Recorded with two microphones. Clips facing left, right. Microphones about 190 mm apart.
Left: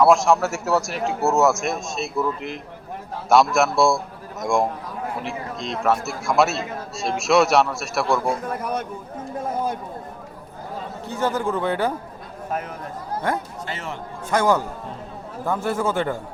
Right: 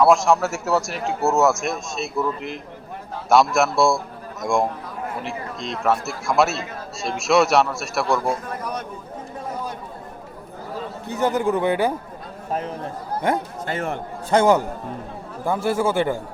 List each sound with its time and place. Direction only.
0.0 s a man's voice: centre (ahead or behind)
11.1 s a man's voice: 15° right (ahead or behind)
12.5 s a man's voice: 30° right (ahead or behind)
13.7 s a man's voice: 55° right (ahead or behind)
14.3 s a man's voice: 25° right (ahead or behind)
15.4 s a man's voice: 10° right (ahead or behind)